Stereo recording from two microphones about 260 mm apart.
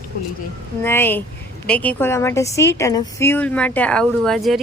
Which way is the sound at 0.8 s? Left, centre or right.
Centre.